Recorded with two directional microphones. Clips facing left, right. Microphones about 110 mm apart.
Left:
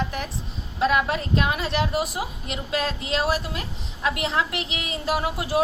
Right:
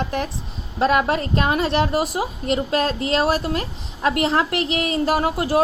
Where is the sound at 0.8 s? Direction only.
45° right (ahead or behind).